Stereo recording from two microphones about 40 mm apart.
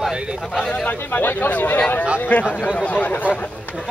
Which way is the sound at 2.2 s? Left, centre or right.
Left.